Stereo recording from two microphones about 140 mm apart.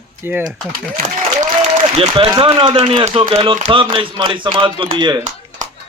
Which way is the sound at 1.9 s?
45° right (ahead or behind).